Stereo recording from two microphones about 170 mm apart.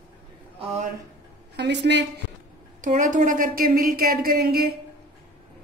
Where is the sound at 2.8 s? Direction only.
50° right (ahead or behind); by 4.7 s 65° right (ahead or behind).